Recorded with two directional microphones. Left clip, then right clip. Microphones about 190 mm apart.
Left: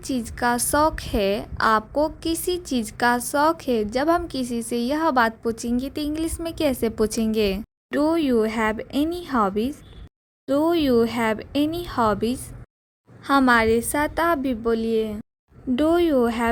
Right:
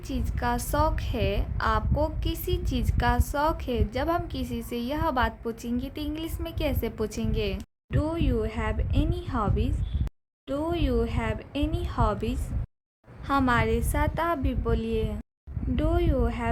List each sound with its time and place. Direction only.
0.0 s a woman's voice: 35° left (ahead or behind)
15.7 s a woman's voice: 40° left (ahead or behind)